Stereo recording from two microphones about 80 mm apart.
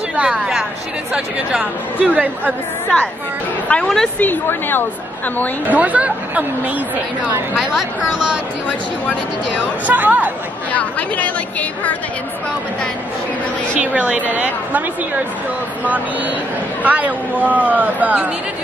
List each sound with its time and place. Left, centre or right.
0.1 s a woman's voice: centre
1.6 s speech: centre
3.6 s speech: centre
4.2 s a woman's voice: left
5.7 s speech: centre
8.6 s speech: centre
9.8 s speech: right
10.7 s speech: centre
13.7 s speech: centre
15.8 s speech: right